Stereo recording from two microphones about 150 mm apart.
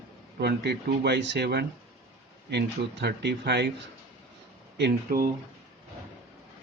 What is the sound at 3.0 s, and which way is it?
Speech, 90° right.